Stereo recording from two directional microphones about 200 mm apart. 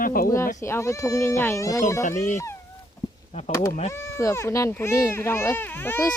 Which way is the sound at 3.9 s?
15° left (ahead or behind).